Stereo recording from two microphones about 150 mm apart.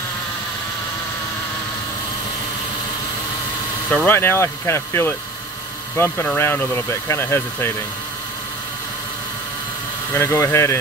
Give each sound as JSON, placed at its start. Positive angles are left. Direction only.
{"t": 3.9, "sound": "speech", "side_deg": 15}
{"t": 10.1, "sound": "speech", "side_deg": 20}